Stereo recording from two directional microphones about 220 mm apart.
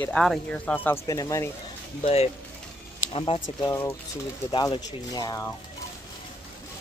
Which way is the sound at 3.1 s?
25° left (ahead or behind).